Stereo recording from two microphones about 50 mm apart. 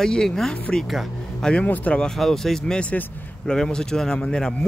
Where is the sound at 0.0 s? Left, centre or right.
Centre.